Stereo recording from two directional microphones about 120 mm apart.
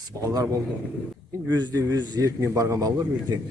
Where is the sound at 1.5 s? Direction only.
30° right (ahead or behind).